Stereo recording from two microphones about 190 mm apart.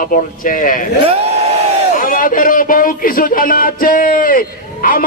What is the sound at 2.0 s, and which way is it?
Speech, 45° left (ahead or behind).